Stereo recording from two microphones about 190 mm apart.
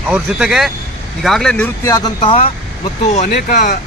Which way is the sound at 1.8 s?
20° left (ahead or behind).